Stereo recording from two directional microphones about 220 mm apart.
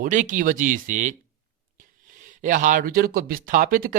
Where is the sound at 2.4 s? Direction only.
35° right (ahead or behind).